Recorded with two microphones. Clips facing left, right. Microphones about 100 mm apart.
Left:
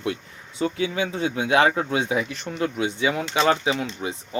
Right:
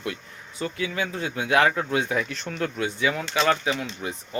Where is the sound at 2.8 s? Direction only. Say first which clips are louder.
Left 1 dB; 20° left (ahead or behind).